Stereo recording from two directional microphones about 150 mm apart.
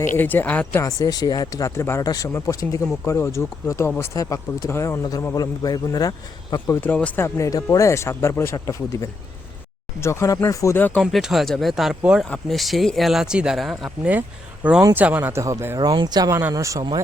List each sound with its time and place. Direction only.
0.2 s speech: 10° left (ahead or behind)
0.9 s speech: 25° left (ahead or behind)
6.8 s speech: 10° left (ahead or behind)
7.3 s speech: 20° left (ahead or behind)
11.0 s speech: centre (ahead or behind); by 16.8 s 20° right (ahead or behind)